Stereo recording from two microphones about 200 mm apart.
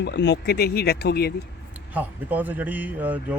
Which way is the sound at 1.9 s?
10° right (ahead or behind).